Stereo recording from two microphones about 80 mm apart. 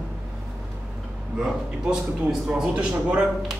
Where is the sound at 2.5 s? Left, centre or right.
Centre.